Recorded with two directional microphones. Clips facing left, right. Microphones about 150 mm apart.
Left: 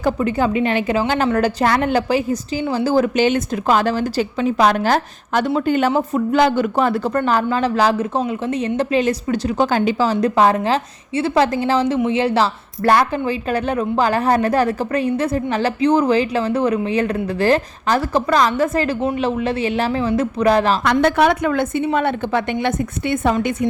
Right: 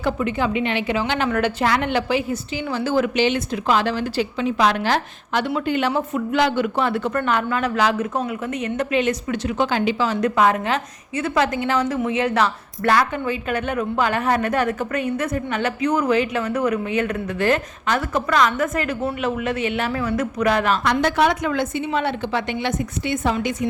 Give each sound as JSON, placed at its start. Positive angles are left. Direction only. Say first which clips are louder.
{"t": 0.0, "sound": "a woman's voice", "louder": "left 4 dB", "side_deg": 40}
{"t": 20.8, "sound": "speech", "louder": "left 4 dB", "side_deg": 55}